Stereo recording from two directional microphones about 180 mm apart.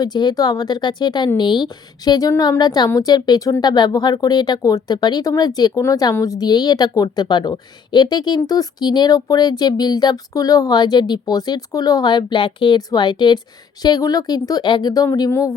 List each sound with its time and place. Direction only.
0.0 s a woman's voice: 25° left (ahead or behind)